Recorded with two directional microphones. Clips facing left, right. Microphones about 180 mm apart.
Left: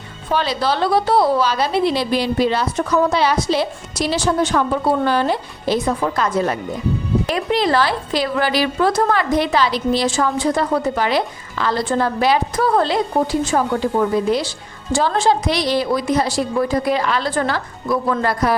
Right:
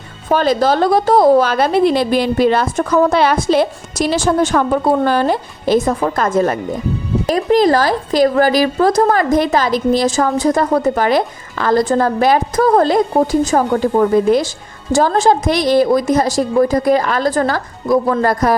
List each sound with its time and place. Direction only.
0.3 s a woman's voice: 45° right (ahead or behind)